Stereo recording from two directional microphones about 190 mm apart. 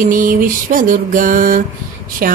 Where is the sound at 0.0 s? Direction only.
45° right (ahead or behind).